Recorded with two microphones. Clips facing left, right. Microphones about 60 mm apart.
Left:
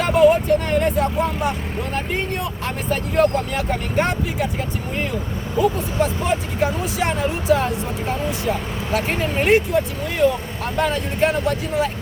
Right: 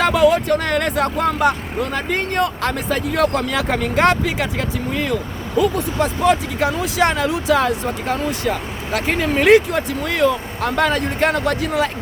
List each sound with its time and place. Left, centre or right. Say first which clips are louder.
0.0 s vehicle: even; right
2.0 s speech: right 5 dB; right
5.5 s speech: right 2 dB; right
8.4 s speech: right 1 dB; right